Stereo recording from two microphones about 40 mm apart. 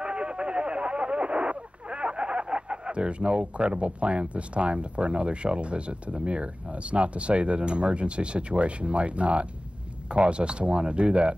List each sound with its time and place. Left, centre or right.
0.0 s speech: right